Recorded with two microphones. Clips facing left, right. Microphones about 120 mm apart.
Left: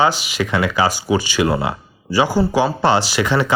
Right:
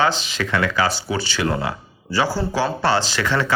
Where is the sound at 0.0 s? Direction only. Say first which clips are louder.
Left 3 dB; 10° left (ahead or behind).